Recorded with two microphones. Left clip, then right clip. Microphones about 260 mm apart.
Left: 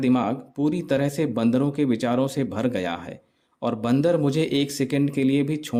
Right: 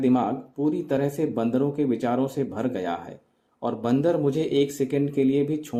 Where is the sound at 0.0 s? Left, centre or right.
Left.